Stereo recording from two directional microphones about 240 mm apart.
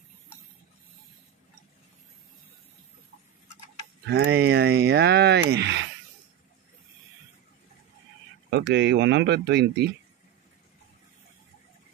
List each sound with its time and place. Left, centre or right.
4.1 s speech: right
8.5 s speech: right